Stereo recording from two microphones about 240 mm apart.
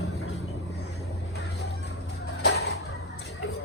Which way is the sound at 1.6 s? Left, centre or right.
Left.